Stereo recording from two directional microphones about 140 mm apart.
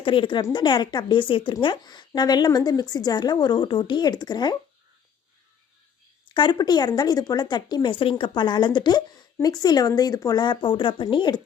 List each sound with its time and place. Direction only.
0.0 s a woman's voice: 40° left (ahead or behind)
6.2 s speech: 35° left (ahead or behind)